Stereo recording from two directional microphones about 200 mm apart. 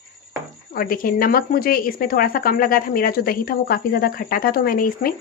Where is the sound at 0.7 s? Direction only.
45° left (ahead or behind).